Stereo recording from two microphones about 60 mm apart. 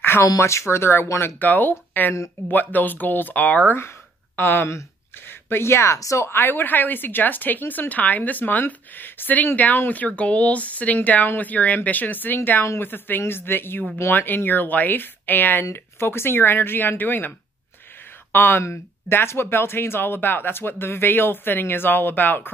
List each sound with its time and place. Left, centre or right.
0.0 s a sound: left
0.4 s speech: left
1.2 s speech: left
4.4 s speech: left
5.2 s speech: left
6.3 s speech: left
18.3 s speech: left